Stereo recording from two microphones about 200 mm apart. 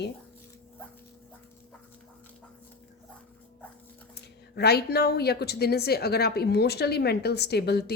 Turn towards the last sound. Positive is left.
turn(degrees=55)  # may be behind; listen again after turning